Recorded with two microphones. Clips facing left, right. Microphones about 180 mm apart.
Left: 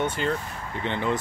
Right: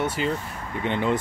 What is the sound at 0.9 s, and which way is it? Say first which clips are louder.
Speech: right 3 dB; 15° right (ahead or behind).